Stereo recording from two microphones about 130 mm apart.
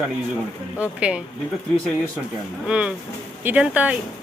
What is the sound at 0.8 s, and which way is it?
Speech, 10° right (ahead or behind).